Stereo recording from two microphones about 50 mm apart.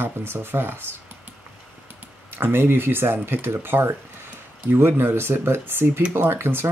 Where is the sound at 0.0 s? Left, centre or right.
Right.